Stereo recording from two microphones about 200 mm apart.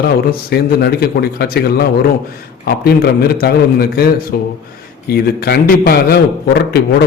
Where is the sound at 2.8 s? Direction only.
55° left (ahead or behind).